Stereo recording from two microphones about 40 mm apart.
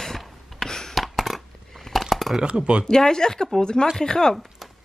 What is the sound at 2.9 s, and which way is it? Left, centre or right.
Speech, centre.